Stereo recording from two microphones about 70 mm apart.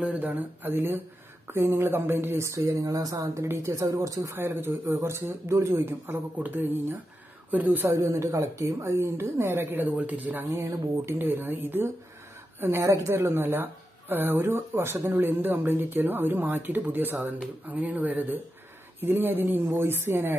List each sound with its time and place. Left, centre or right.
0.0 s speech: right
2.8 s speech: right
3.3 s speech: right
3.8 s speech: right
4.4 s speech: right
7.8 s speech: right
10.5 s speech: right
11.1 s a woman's voice: right
12.8 s speech: right
13.1 s speech: right